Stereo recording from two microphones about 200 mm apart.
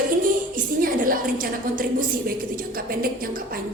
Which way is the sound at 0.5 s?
45° right (ahead or behind).